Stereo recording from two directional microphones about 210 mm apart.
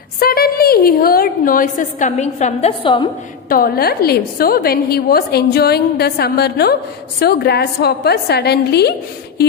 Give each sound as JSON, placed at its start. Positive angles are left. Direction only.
{"t": 0.2, "sound": "a woman's voice", "side_deg": 45}
{"t": 3.4, "sound": "a woman's voice", "side_deg": 45}